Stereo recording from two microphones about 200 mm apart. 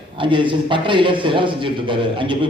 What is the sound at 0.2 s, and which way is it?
A man's voice, 25° right (ahead or behind).